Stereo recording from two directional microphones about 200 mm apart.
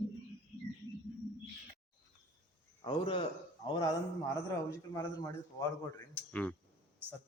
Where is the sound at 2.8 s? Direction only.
25° left (ahead or behind).